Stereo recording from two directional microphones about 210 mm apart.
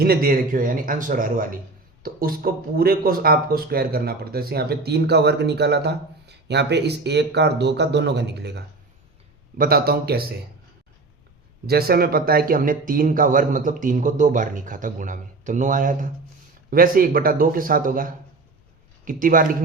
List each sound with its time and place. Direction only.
0.0 s speech: 45° right (ahead or behind)
11.6 s speech: 50° right (ahead or behind)